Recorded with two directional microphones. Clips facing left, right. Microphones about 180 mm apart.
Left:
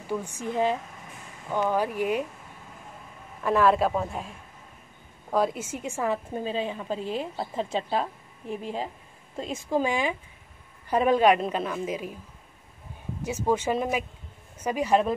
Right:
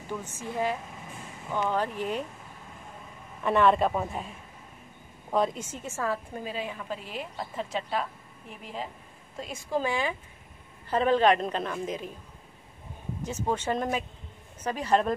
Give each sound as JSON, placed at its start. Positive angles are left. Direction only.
{"t": 0.2, "sound": "a woman's voice", "side_deg": 15}
{"t": 3.4, "sound": "a woman's voice", "side_deg": 0}
{"t": 9.4, "sound": "a woman's voice", "side_deg": 20}
{"t": 13.2, "sound": "a woman's voice", "side_deg": 10}